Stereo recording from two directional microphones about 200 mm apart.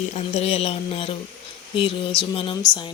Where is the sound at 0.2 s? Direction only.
30° left (ahead or behind).